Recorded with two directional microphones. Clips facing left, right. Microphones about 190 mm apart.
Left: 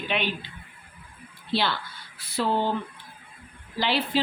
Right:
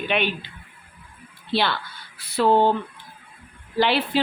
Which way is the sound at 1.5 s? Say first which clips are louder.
Right 3 dB; 65° right (ahead or behind).